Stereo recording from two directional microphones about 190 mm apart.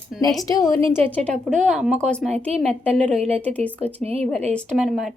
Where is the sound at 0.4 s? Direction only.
20° left (ahead or behind).